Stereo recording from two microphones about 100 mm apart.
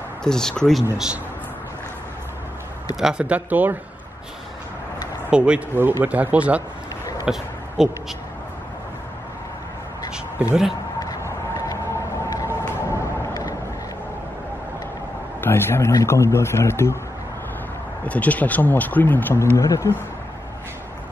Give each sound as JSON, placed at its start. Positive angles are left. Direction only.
{"t": 0.2, "sound": "speech", "side_deg": 5}
{"t": 0.9, "sound": "speech", "side_deg": -5}
{"t": 3.0, "sound": "speech", "side_deg": -5}
{"t": 5.3, "sound": "speech", "side_deg": -10}
{"t": 7.2, "sound": "a sound", "side_deg": 0}
{"t": 10.1, "sound": "a sound", "side_deg": -10}
{"t": 11.5, "sound": "vehicle", "side_deg": 30}
{"t": 12.9, "sound": "a sound", "side_deg": 35}
{"t": 15.4, "sound": "a man's voice", "side_deg": 25}
{"t": 18.0, "sound": "speech", "side_deg": 15}
{"t": 19.5, "sound": "speech", "side_deg": 30}